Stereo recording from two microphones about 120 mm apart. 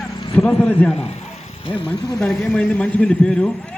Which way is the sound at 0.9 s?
60° left (ahead or behind).